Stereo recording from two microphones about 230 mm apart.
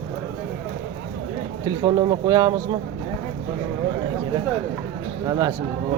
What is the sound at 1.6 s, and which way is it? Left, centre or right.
Speech, centre.